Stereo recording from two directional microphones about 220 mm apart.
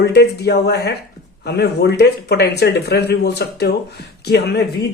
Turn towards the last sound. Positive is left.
turn(degrees=45)  # may be behind; listen again after turning